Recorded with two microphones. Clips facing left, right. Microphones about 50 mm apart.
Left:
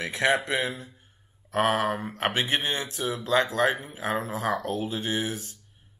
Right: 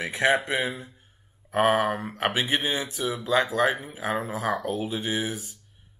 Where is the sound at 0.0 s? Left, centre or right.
Centre.